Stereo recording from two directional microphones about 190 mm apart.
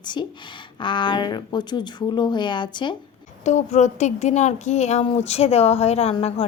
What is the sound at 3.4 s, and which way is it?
Speech, 40° left (ahead or behind).